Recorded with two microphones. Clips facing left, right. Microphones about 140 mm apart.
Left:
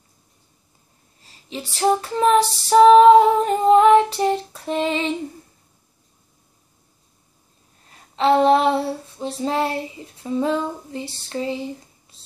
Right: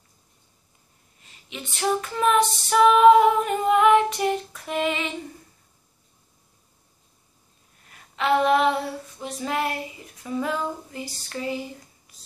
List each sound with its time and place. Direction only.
1.2 s female singing: 35° left (ahead or behind)
7.8 s female singing: 30° left (ahead or behind)